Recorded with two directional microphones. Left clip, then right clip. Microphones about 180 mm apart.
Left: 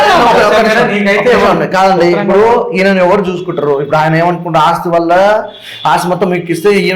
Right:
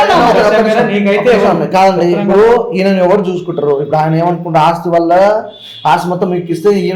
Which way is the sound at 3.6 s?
15° left (ahead or behind).